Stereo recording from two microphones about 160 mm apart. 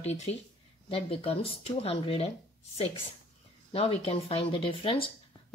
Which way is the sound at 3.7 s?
35° left (ahead or behind).